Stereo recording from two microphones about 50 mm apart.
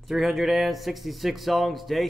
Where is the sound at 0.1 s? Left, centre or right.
Centre.